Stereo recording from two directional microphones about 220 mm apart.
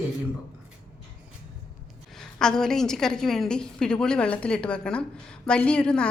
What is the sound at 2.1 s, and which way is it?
A woman's voice, 5° left (ahead or behind).